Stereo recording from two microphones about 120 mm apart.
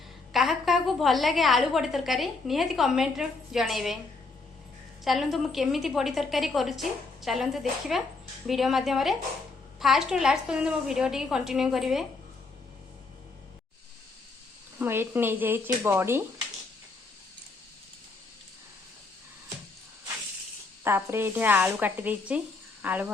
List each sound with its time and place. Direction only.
0.3 s a woman's voice: centre (ahead or behind)
5.0 s a woman's voice: centre (ahead or behind)
14.8 s speech: 20° right (ahead or behind)
20.8 s speech: 20° right (ahead or behind)